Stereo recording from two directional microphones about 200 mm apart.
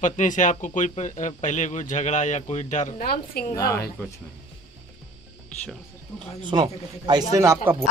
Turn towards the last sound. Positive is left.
turn(degrees=-15)  # may be behind; listen again after turning